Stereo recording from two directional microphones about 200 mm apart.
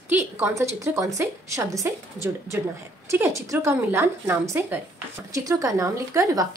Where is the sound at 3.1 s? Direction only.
15° right (ahead or behind).